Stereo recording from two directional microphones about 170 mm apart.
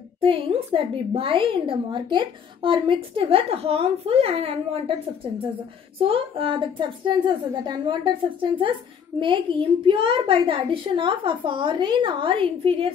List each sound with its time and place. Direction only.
0.2 s a woman's voice: 30° right (ahead or behind)